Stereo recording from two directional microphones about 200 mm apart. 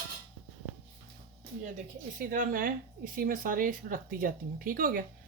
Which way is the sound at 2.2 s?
45° right (ahead or behind).